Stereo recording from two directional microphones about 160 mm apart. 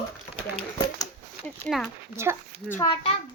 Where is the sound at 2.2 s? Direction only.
15° right (ahead or behind).